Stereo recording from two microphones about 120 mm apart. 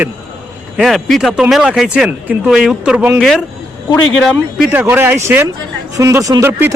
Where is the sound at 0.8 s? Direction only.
Centre (ahead or behind).